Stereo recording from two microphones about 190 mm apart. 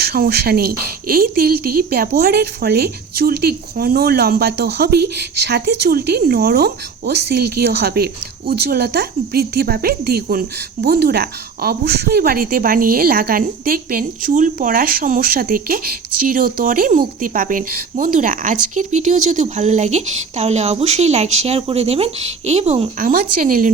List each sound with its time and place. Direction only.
0.0 s speech: 55° right (ahead or behind)